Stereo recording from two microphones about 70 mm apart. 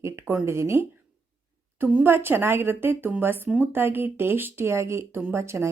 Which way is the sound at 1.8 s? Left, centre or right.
Right.